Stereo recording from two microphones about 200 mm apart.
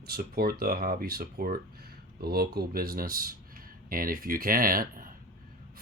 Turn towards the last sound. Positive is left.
turn(degrees=-45)  # may be behind; listen again after turning